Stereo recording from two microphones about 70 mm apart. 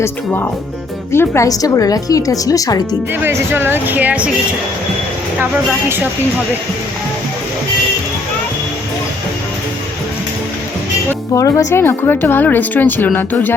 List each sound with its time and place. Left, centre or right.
1.1 s a woman's voice: left
1.5 s a woman's voice: left
3.2 s speech: right
11.3 s speech: left
11.7 s speech: left